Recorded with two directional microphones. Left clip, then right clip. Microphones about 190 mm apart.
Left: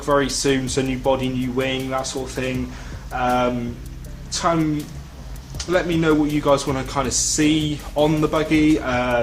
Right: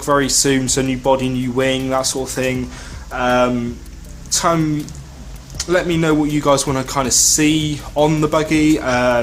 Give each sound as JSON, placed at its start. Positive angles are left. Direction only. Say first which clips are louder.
{"t": 0.0, "sound": "speech", "louder": "right 3 dB", "side_deg": -30}
{"t": 5.5, "sound": "speech", "louder": "right 3 dB", "side_deg": -30}